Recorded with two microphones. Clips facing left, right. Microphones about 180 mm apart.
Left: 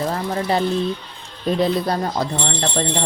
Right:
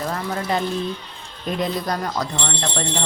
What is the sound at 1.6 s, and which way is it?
Speech, 30° left (ahead or behind).